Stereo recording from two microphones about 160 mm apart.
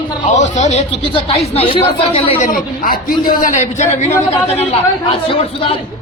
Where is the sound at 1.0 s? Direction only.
35° left (ahead or behind).